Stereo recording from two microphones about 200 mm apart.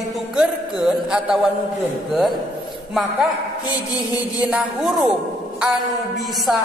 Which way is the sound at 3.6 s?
20° left (ahead or behind).